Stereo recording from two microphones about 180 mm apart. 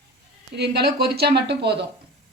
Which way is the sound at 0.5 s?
65° right (ahead or behind).